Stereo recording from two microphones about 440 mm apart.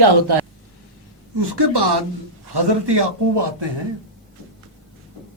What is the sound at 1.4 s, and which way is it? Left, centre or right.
A man's voice, right.